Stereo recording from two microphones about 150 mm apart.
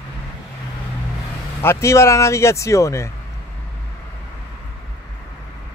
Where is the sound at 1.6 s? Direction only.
20° left (ahead or behind).